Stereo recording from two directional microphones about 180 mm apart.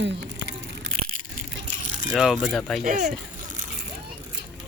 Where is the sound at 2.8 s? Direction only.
50° right (ahead or behind).